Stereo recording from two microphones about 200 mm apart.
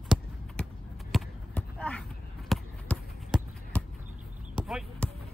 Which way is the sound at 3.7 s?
5° left (ahead or behind).